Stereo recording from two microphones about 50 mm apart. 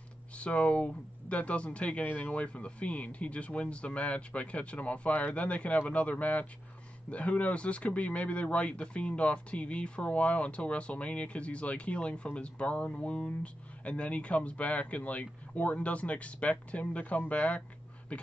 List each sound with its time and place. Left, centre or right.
0.4 s speech: left